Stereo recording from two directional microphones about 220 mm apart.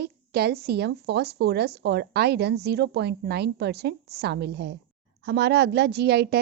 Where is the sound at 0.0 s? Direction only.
45° right (ahead or behind).